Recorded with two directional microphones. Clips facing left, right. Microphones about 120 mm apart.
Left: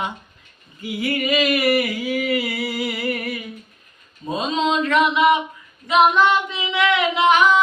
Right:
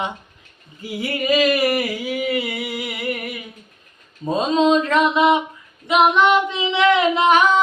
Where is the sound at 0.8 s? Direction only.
35° right (ahead or behind).